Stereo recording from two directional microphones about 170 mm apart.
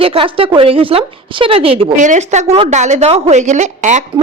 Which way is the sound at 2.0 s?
45° right (ahead or behind).